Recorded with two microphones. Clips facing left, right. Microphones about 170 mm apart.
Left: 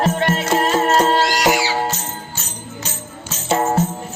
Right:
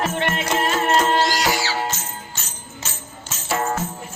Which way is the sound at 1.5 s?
15° left (ahead or behind).